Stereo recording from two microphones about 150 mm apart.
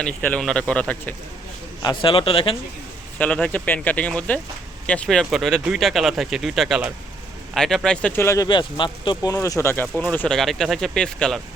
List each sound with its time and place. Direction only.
0.0 s speech: 10° left (ahead or behind)
1.8 s speech: 30° left (ahead or behind)
3.2 s speech: 10° left (ahead or behind)
8.4 s speech: 30° left (ahead or behind)
9.3 s speech: 20° left (ahead or behind)